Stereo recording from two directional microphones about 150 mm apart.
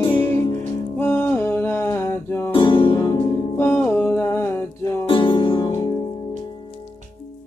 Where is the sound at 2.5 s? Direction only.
35° left (ahead or behind).